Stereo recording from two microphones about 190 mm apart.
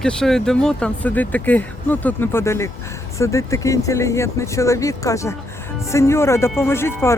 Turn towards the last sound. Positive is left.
turn(degrees=15)  # may be behind; listen again after turning